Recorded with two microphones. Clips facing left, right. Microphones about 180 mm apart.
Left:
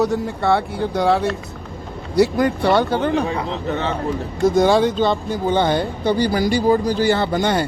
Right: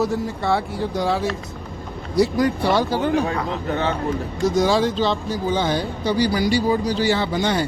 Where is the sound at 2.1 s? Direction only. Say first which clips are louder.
Left 2 dB; 60° left (ahead or behind).